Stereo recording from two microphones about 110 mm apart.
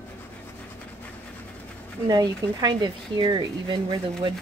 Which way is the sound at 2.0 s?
35° right (ahead or behind).